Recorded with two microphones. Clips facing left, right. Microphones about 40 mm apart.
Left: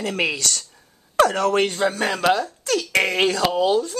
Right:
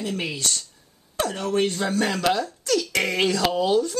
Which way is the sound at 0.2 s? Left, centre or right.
Left.